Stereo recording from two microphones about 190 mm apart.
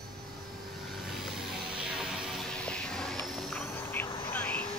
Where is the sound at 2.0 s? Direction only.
Centre (ahead or behind).